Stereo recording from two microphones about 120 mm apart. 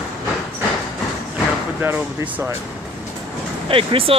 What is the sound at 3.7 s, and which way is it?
Speech, 50° right (ahead or behind).